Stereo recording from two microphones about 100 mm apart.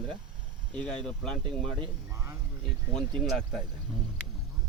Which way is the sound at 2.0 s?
30° right (ahead or behind).